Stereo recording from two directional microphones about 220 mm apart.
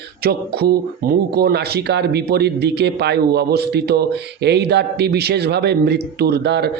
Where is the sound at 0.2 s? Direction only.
45° right (ahead or behind).